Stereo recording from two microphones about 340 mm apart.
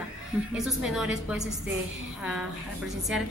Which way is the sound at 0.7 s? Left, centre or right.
Centre.